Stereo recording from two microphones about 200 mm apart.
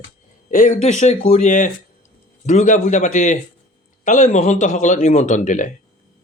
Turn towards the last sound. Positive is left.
turn(degrees=40)  # may be behind; listen again after turning